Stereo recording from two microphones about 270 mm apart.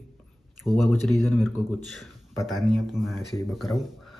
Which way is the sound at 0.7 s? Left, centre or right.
Centre.